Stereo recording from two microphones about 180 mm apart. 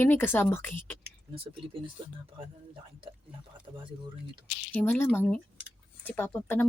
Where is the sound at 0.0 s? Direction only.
10° left (ahead or behind).